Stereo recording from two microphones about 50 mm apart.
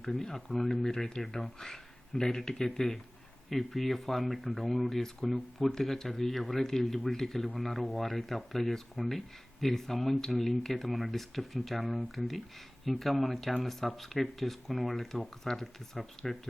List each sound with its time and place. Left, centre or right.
0.0 s speech: centre